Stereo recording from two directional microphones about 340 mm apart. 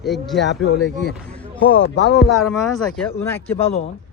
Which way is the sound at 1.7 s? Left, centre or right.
Left.